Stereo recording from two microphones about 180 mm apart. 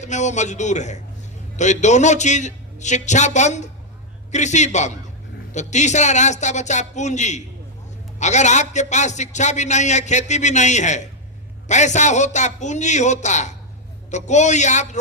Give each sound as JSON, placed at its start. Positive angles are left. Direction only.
{"t": 0.0, "sound": "a man's voice", "side_deg": 40}